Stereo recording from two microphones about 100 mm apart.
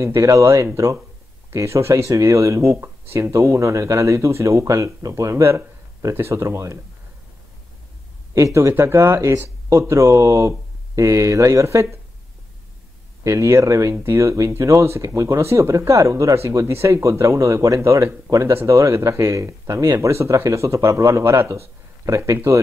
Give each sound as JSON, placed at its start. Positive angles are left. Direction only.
{"t": 0.0, "sound": "speech", "side_deg": -30}
{"t": 8.4, "sound": "speech", "side_deg": -30}
{"t": 13.2, "sound": "speech", "side_deg": -30}